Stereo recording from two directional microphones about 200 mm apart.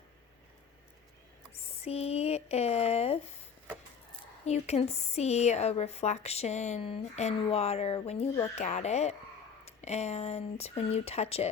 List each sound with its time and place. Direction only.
1.8 s speech: 30° left (ahead or behind)
4.4 s speech: 35° left (ahead or behind)